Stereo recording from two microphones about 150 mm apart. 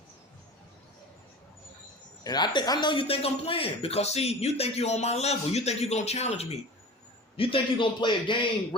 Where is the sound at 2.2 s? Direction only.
25° left (ahead or behind).